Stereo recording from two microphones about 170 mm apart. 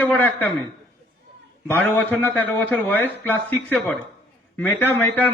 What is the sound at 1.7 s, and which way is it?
A man's voice, 10° left (ahead or behind).